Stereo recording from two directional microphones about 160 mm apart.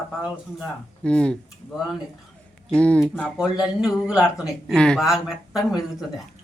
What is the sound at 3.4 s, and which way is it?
Speech, 5° right (ahead or behind).